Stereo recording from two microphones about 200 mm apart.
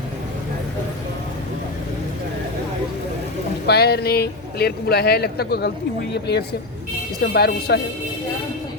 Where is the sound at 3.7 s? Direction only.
55° left (ahead or behind).